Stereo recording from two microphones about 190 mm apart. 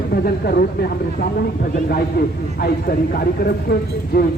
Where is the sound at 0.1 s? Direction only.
55° left (ahead or behind).